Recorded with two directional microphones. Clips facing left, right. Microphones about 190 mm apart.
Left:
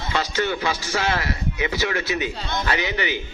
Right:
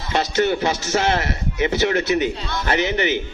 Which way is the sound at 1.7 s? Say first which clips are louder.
Right 8 dB; 45° right (ahead or behind).